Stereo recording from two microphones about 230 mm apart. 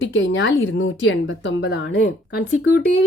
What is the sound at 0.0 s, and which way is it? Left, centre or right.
A woman's voice, left.